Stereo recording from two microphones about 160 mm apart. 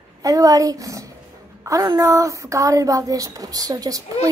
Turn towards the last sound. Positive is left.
turn(degrees=-20)  # may be behind; listen again after turning